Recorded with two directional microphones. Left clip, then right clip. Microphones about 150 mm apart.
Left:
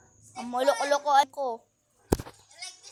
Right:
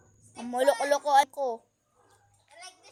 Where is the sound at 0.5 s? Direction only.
20° right (ahead or behind).